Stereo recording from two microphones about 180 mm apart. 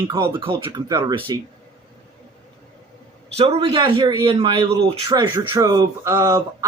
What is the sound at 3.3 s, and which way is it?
Speech, 35° right (ahead or behind).